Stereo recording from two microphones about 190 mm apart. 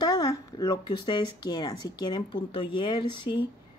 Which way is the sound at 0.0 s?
20° left (ahead or behind).